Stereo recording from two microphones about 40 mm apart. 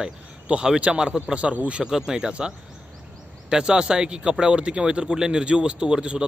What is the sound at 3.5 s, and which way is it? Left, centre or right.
A man's voice, centre.